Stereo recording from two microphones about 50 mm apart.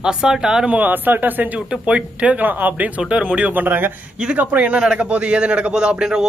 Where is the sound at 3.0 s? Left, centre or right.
Right.